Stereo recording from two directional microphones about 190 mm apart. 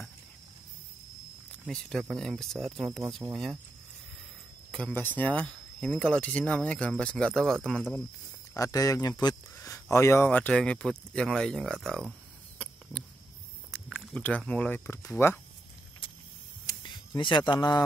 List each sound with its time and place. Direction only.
1.7 s speech: centre (ahead or behind)
3.2 s speech: 15° right (ahead or behind)
4.7 s speech: 5° left (ahead or behind)
8.5 s speech: 20° left (ahead or behind); by 12.1 s centre (ahead or behind)
13.7 s speech: centre (ahead or behind)
16.6 s a sound: 20° left (ahead or behind)